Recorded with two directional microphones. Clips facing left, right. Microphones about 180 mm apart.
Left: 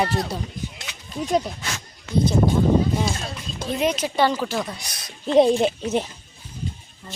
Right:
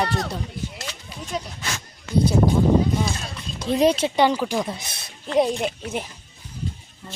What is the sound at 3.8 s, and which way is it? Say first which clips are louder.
Speech: right 3 dB; 30° right (ahead or behind).